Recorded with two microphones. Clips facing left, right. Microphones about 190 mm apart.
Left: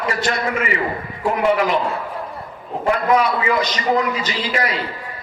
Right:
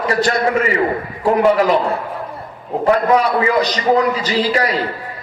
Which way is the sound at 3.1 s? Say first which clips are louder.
Right 3 dB; 35° right (ahead or behind).